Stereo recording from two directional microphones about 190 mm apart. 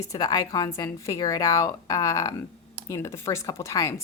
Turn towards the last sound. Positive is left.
turn(degrees=15)  # may be behind; listen again after turning